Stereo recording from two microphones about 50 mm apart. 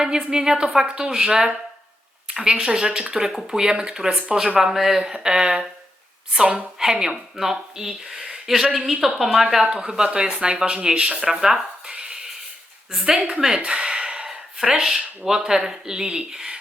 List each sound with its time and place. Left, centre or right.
0.0 s a woman's voice: centre
6.7 s speech: centre
9.6 s speech: centre
11.4 s speech: centre
11.9 s a sound: centre
12.9 s speech: centre
13.6 s a sound: centre
14.3 s speech: centre